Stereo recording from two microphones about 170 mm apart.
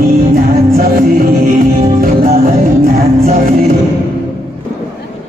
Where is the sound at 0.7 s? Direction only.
60° right (ahead or behind).